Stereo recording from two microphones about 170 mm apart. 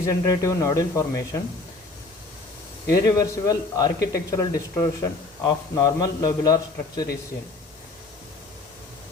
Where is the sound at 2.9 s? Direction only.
20° left (ahead or behind).